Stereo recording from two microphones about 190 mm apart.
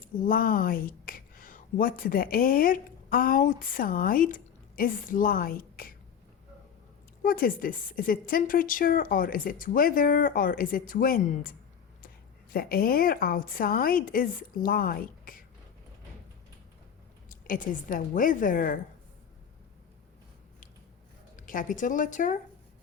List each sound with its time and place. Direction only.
0.2 s a woman's voice: 45° left (ahead or behind)
7.2 s a woman's voice: 50° left (ahead or behind)
12.5 s a woman's voice: 50° left (ahead or behind)
17.2 s a woman's voice: 45° left (ahead or behind)
21.3 s a woman's voice: 45° left (ahead or behind)